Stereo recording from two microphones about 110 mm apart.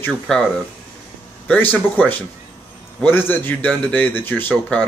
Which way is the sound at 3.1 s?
20° left (ahead or behind).